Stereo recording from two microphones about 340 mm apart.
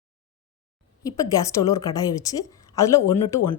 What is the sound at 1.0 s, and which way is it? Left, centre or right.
Speech, centre.